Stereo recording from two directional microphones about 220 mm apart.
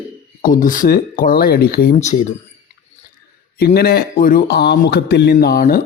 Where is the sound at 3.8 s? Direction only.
45° left (ahead or behind).